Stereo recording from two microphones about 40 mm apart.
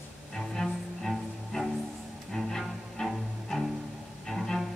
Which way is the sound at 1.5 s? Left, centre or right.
Centre.